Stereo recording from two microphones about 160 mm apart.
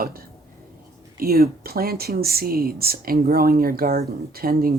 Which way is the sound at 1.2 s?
70° right (ahead or behind).